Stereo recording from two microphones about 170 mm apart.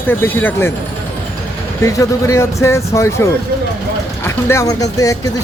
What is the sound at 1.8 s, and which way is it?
Speech, 15° left (ahead or behind).